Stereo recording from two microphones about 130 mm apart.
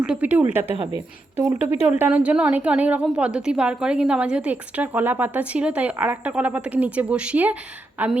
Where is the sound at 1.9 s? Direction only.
10° right (ahead or behind).